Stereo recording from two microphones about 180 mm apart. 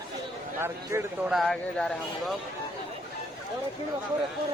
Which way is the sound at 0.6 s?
15° right (ahead or behind).